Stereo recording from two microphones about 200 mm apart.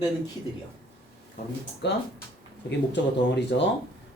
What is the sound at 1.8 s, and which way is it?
Speech, 60° left (ahead or behind).